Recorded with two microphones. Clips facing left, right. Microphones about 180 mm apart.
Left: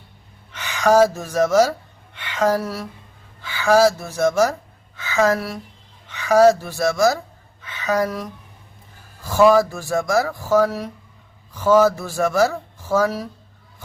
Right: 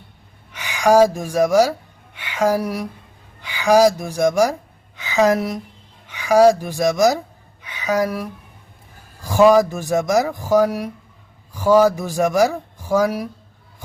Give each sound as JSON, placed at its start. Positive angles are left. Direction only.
{"t": 0.5, "sound": "a woman's voice", "side_deg": -10}
{"t": 7.6, "sound": "a sound", "side_deg": -10}
{"t": 9.2, "sound": "speech", "side_deg": -15}